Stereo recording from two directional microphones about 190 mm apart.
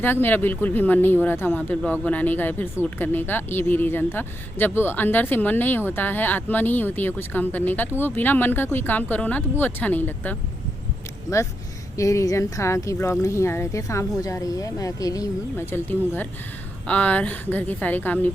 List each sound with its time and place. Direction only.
0.0 s speech: 10° left (ahead or behind)
11.9 s speech: 15° left (ahead or behind)